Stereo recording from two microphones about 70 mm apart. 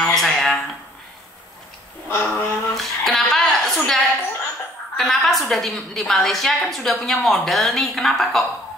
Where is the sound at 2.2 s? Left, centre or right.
Left.